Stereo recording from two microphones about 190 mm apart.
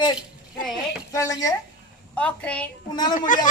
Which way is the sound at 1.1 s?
15° left (ahead or behind).